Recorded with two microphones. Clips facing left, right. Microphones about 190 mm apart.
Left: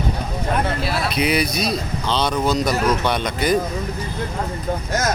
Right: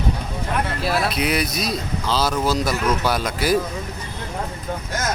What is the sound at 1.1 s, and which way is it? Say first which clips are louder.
Speech: left 2 dB; centre (ahead or behind).